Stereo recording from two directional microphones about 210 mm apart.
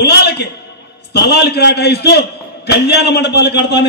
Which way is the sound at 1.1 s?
50° left (ahead or behind).